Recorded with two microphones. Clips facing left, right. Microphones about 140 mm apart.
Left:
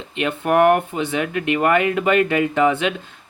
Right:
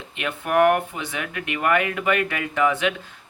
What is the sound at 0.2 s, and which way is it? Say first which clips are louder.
Speech: left 3 dB; 25° left (ahead or behind).